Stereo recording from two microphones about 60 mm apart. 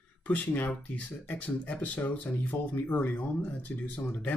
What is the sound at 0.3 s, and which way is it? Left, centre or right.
Speech, left.